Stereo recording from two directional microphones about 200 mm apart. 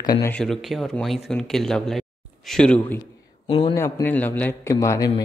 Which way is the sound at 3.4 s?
25° left (ahead or behind).